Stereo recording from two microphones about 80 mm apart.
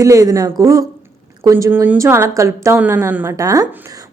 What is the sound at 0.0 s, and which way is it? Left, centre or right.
A woman's voice, right.